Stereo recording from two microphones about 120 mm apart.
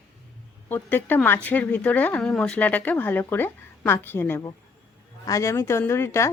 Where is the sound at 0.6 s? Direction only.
15° left (ahead or behind).